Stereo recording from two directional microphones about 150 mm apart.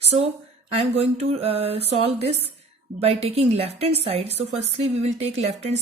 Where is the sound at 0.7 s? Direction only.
40° right (ahead or behind).